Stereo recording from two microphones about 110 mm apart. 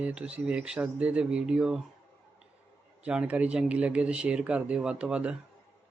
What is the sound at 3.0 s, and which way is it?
Speech, 10° right (ahead or behind).